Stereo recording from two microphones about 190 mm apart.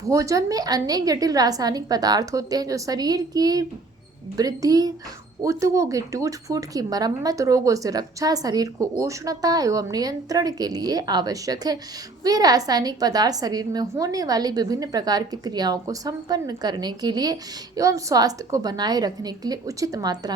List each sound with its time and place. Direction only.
0.0 s a woman's voice: 15° right (ahead or behind)